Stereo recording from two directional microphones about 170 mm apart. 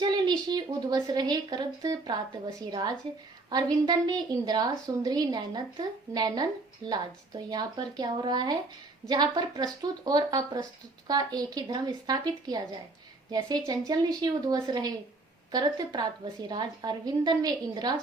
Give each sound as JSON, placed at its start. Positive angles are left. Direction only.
{"t": 0.0, "sound": "a woman's voice", "side_deg": -25}